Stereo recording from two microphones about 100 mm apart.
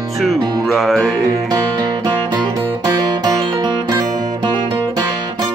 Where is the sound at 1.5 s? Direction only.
40° right (ahead or behind).